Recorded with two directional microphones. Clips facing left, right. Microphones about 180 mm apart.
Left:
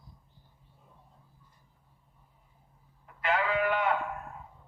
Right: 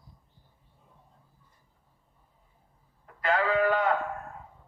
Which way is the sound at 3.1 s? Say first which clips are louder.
Right 3 dB; 40° right (ahead or behind).